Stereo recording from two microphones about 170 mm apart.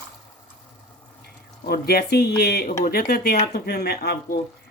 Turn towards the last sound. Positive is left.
turn(degrees=65)  # may be behind; listen again after turning